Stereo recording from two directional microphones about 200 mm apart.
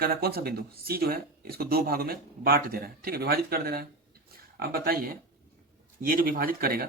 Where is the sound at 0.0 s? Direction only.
50° right (ahead or behind).